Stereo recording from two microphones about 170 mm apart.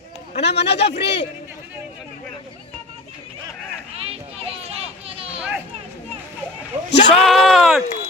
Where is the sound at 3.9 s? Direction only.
35° right (ahead or behind).